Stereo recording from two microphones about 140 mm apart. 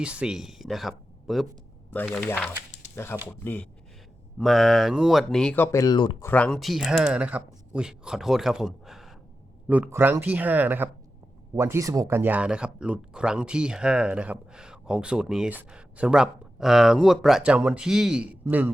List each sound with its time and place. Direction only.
0.0 s speech: 5° right (ahead or behind)
1.9 s speech: 10° left (ahead or behind)
4.4 s speech: centre (ahead or behind)
5.6 s speech: 25° left (ahead or behind)
6.2 s speech: 10° left (ahead or behind)
9.6 s speech: 10° right (ahead or behind)